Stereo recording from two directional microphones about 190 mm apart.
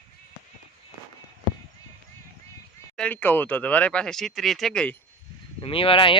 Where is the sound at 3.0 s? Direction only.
10° left (ahead or behind).